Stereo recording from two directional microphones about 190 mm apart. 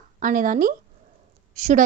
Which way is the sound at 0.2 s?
45° right (ahead or behind).